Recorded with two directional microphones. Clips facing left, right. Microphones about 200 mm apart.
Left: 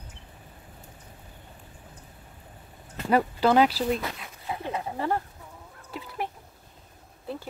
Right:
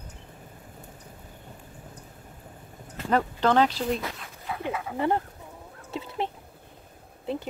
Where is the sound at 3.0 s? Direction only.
10° left (ahead or behind).